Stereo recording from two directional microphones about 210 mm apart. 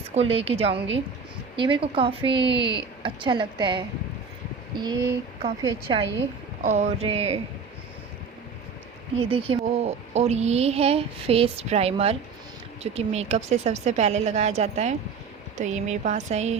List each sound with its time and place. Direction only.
0.1 s speech: 30° right (ahead or behind)
4.8 s a sound: 20° right (ahead or behind)
5.6 s speech: 20° right (ahead or behind)
6.6 s speech: 35° right (ahead or behind)
9.1 s speech: 25° right (ahead or behind)